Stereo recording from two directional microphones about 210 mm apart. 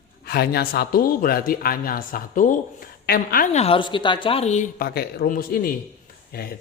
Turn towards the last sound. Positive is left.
turn(degrees=45)  # may be behind; listen again after turning